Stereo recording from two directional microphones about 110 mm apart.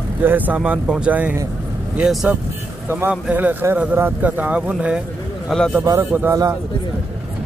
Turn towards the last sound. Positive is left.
turn(degrees=-30)  # may be behind; listen again after turning